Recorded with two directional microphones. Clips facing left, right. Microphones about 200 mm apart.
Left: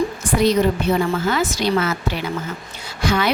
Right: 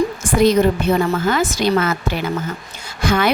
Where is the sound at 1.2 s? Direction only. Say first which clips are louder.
Right 2 dB; 50° right (ahead or behind).